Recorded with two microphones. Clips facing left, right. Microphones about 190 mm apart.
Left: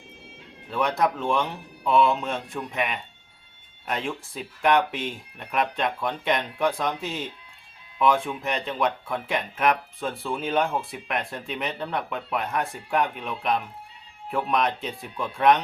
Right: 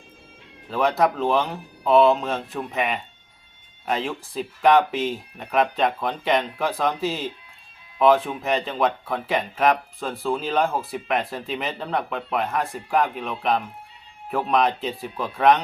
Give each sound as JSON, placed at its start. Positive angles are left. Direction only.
{"t": 0.7, "sound": "speech", "side_deg": 0}
{"t": 10.1, "sound": "speech", "side_deg": -35}
{"t": 10.4, "sound": "speech", "side_deg": 0}